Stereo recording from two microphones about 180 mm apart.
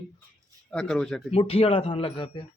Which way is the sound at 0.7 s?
5° left (ahead or behind).